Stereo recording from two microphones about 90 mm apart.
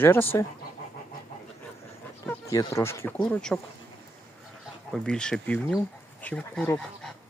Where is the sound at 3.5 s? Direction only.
Centre (ahead or behind).